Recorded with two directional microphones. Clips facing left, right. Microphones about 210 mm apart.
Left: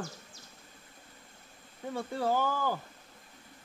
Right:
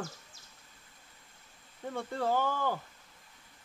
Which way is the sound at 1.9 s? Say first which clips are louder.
Left 1 dB; 5° left (ahead or behind).